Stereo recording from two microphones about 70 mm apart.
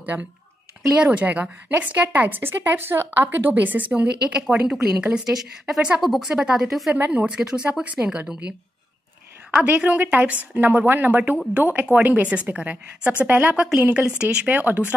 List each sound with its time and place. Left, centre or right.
0.0 s a woman's voice: centre
6.9 s a woman's voice: centre
9.6 s a woman's voice: centre